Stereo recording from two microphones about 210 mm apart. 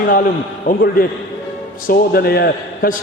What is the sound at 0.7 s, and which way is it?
A man's voice, 45° left (ahead or behind).